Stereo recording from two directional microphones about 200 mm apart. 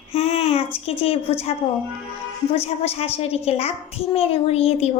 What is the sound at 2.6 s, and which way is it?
A child's voice, 30° left (ahead or behind).